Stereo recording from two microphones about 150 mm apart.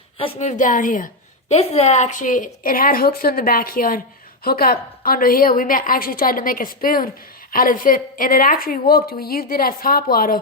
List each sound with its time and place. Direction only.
0.2 s a woman's voice: 45° left (ahead or behind); by 1.1 s 65° left (ahead or behind)
1.5 s a woman's voice: 45° left (ahead or behind); by 10.3 s 75° left (ahead or behind)